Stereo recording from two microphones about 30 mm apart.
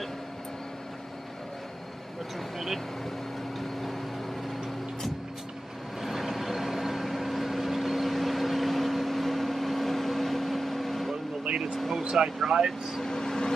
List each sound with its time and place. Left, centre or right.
5.9 s vehicle: centre
12.0 s speech: right
12.4 s speech: centre
13.0 s speech: left